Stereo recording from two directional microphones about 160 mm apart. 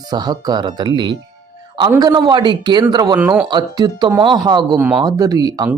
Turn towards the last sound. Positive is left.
turn(degrees=-25)  # may be behind; listen again after turning